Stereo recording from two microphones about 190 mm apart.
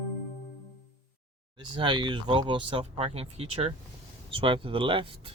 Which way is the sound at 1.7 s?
25° right (ahead or behind).